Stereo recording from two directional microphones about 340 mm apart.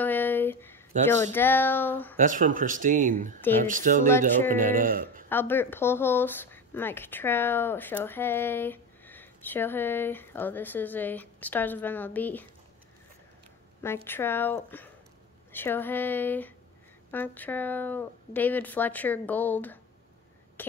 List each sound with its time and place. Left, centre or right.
0.0 s a sound: centre
1.3 s a woman's voice: centre
2.1 s speech: right
5.3 s a woman's voice: centre
14.0 s a woman's voice: centre